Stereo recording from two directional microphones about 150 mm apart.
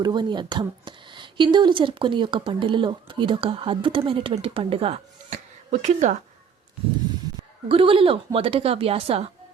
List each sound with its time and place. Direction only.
0.0 s speech: 30° right (ahead or behind)
5.8 s speech: 55° right (ahead or behind)
7.7 s speech: 35° right (ahead or behind)